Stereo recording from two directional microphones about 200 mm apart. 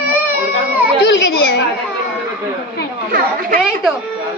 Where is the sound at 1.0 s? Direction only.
65° left (ahead or behind).